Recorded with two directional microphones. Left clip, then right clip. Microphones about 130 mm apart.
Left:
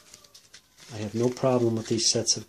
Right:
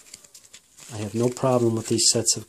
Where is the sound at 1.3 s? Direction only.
45° right (ahead or behind).